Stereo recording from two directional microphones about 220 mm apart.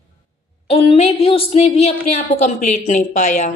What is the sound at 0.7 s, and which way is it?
A woman's voice, 30° left (ahead or behind).